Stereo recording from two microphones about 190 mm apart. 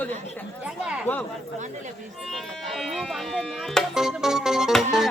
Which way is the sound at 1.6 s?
40° right (ahead or behind).